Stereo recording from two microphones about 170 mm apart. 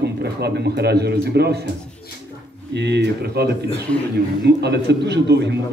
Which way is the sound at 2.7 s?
90° right.